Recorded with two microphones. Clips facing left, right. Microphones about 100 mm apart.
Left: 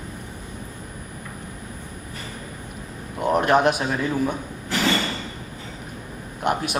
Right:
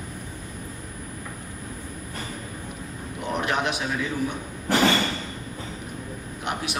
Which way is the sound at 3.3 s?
45° left (ahead or behind).